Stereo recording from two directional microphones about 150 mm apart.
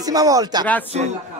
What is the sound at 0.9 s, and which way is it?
Speech, 50° right (ahead or behind).